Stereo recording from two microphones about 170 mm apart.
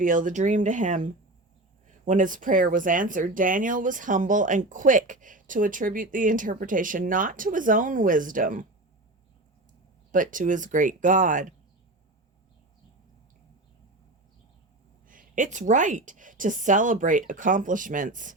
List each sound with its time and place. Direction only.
0.0 s speech: 50° right (ahead or behind)
2.0 s speech: 50° right (ahead or behind)
10.1 s speech: 50° right (ahead or behind)
15.0 s speech: 50° right (ahead or behind)